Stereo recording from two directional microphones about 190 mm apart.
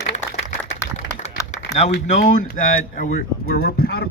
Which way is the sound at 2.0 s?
40° left (ahead or behind).